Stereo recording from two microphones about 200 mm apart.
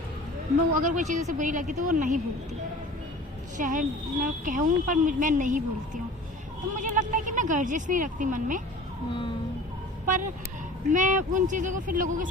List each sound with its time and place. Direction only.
0.8 s a woman's voice: 40° right (ahead or behind)
3.6 s a woman's voice: 40° right (ahead or behind)
10.1 s a woman's voice: 40° right (ahead or behind)